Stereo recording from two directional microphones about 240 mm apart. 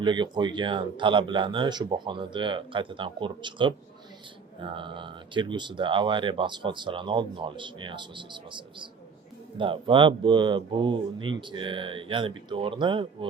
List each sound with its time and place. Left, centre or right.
0.0 s speech: centre